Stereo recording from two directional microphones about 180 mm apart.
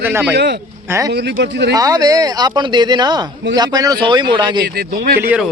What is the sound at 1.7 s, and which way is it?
Speech, 20° right (ahead or behind).